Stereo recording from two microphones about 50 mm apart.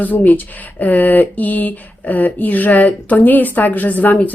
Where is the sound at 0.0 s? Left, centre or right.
Left.